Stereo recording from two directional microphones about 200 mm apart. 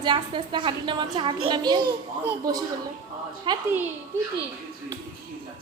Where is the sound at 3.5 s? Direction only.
20° right (ahead or behind).